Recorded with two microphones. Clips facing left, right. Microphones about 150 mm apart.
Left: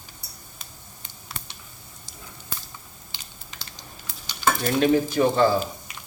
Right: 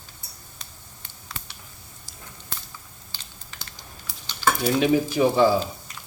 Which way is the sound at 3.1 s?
20° left (ahead or behind).